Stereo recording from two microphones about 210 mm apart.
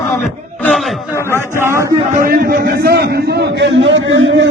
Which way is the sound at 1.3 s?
10° right (ahead or behind).